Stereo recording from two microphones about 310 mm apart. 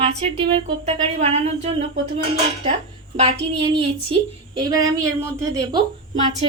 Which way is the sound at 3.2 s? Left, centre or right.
Centre.